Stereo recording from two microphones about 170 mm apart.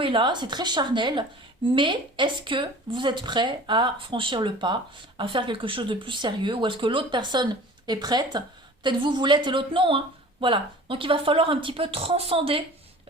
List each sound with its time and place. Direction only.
0.0 s speech: 30° right (ahead or behind)